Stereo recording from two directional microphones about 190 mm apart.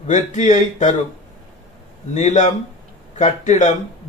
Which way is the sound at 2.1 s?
40° left (ahead or behind).